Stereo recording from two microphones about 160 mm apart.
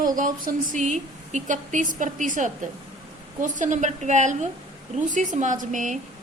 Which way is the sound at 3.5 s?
50° right (ahead or behind).